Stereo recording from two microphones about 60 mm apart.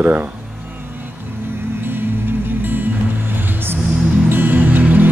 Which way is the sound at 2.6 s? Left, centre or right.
Right.